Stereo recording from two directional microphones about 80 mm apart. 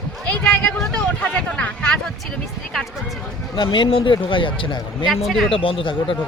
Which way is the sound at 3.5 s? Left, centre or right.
Left.